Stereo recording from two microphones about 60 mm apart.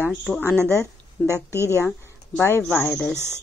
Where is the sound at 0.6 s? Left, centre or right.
Right.